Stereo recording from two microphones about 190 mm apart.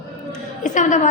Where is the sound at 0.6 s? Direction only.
40° left (ahead or behind).